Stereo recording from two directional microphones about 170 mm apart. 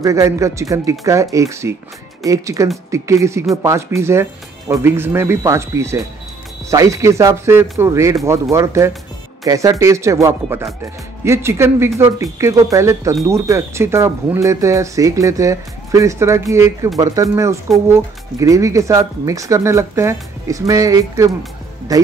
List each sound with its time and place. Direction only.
0.0 s speech: 20° right (ahead or behind)